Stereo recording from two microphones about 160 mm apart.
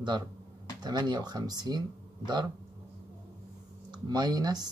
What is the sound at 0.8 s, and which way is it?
Speech, 25° right (ahead or behind).